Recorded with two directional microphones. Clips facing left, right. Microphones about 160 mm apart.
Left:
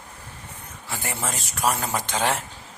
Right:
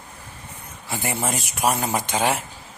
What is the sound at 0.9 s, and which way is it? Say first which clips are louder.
Speech: right 4 dB; 15° right (ahead or behind).